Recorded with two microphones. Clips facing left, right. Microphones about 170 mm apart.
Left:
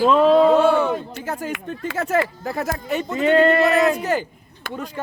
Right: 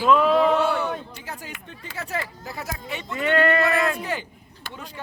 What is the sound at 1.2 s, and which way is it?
Speech, 50° left (ahead or behind).